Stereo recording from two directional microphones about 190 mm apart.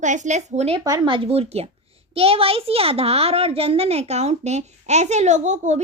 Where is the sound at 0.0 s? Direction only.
40° right (ahead or behind).